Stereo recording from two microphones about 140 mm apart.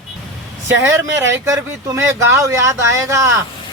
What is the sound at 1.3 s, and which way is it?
Speech, 20° right (ahead or behind).